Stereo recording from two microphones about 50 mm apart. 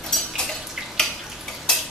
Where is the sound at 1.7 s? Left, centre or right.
Centre.